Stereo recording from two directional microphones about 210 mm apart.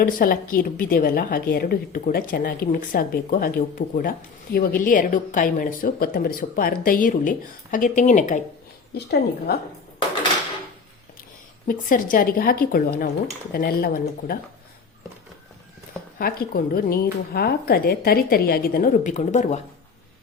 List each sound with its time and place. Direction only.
0.0 s a woman's voice: 40° left (ahead or behind)
9.0 s a woman's voice: 50° left (ahead or behind)
11.7 s a woman's voice: 40° left (ahead or behind)
16.1 s a woman's voice: 45° left (ahead or behind)